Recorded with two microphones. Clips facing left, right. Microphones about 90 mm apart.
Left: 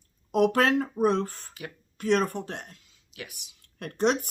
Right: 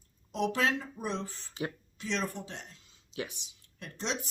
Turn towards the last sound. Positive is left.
turn(degrees=55)  # may be behind; listen again after turning